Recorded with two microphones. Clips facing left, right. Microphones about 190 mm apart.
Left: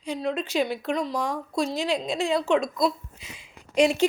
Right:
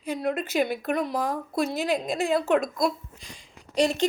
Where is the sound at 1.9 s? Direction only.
Centre (ahead or behind).